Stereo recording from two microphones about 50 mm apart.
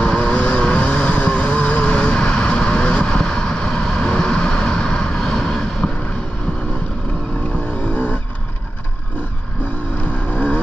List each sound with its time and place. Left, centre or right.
0.0 s vehicle: centre
7.9 s vehicle: left
10.3 s vehicle: left